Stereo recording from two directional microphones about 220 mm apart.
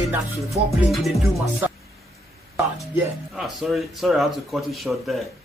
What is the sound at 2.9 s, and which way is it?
A man's voice, centre (ahead or behind).